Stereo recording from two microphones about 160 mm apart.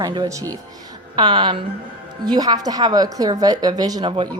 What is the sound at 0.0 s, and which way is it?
A woman's voice, 25° right (ahead or behind).